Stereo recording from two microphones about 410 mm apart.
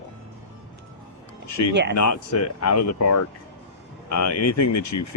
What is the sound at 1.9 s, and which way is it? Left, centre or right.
Speech, left.